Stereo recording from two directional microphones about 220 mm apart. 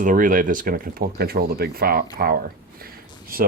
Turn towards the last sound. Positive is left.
turn(degrees=-40)  # may be behind; listen again after turning